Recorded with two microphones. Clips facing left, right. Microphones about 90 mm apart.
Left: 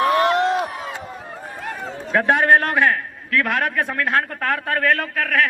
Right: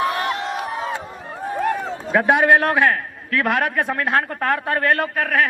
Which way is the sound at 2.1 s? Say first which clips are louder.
Right 1 dB; 15° right (ahead or behind).